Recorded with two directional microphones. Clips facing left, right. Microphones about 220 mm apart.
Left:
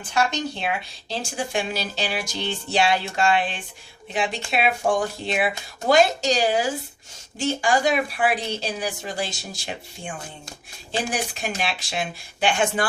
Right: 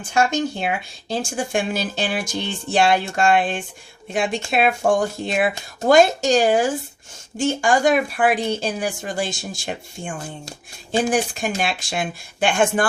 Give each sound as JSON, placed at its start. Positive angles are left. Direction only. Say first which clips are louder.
{"t": 0.1, "sound": "speech", "louder": "right 4 dB", "side_deg": -45}